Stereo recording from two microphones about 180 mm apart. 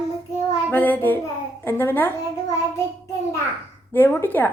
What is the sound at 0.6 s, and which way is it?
A woman's voice, 10° left (ahead or behind).